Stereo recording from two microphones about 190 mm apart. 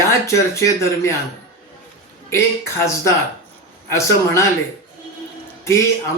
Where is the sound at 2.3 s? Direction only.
15° left (ahead or behind).